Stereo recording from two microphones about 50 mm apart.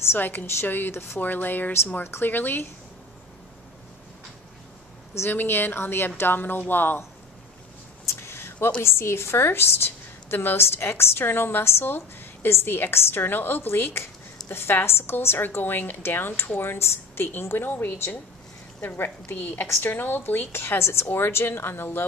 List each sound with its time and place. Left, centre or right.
0.1 s a woman's voice: left
5.3 s a woman's voice: left
8.0 s a sound: left
8.8 s a woman's voice: left